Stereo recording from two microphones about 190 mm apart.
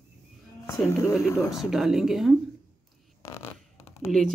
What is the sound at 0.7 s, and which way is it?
Speech, 15° left (ahead or behind).